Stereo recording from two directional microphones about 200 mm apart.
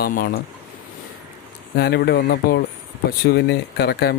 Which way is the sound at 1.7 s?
55° left (ahead or behind).